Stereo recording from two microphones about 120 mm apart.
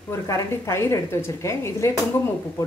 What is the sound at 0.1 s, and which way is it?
Speech, 25° left (ahead or behind).